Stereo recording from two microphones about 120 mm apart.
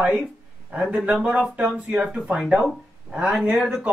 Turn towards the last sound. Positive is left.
turn(degrees=-5)  # may be behind; listen again after turning